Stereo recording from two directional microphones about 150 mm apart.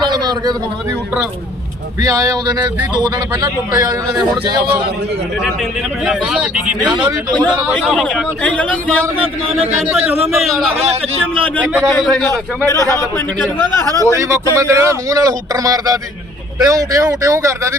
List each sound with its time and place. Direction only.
0.0 s a sound: 30° right (ahead or behind)
2.0 s speech: 25° right (ahead or behind)
6.1 s a man's voice: 5° right (ahead or behind)
9.1 s speech: 40° right (ahead or behind)
9.7 s a man's voice: 5° right (ahead or behind)
10.8 s a man's voice: 45° right (ahead or behind)
11.6 s speech: 10° right (ahead or behind)
11.9 s a man's voice: 5° left (ahead or behind)
12.3 s speech: 25° right (ahead or behind)
12.8 s a man's voice: 20° left (ahead or behind)
14.2 s speech: 20° right (ahead or behind)